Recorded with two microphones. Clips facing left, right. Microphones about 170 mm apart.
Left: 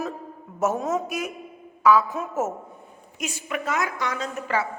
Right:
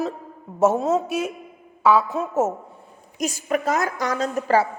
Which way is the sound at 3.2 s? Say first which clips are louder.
Right 7 dB; 40° right (ahead or behind).